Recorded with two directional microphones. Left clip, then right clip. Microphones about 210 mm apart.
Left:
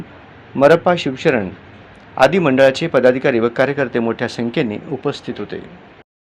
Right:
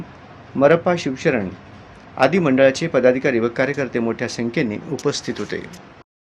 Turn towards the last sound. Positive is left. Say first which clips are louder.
# even
turn(degrees=-15)  # may be behind; listen again after turning